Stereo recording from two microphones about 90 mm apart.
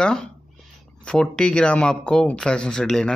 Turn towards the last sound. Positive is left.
turn(degrees=5)  # may be behind; listen again after turning